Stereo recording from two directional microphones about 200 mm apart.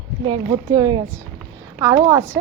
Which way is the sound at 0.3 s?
20° right (ahead or behind).